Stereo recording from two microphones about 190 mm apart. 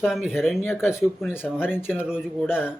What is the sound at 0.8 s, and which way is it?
Speech, 15° left (ahead or behind).